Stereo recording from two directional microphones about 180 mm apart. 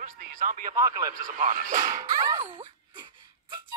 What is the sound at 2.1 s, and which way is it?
Speech, 20° right (ahead or behind).